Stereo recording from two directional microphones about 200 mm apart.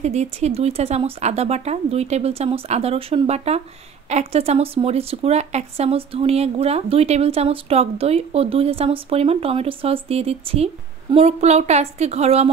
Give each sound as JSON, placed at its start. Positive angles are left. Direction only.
{"t": 0.0, "sound": "speech", "side_deg": -35}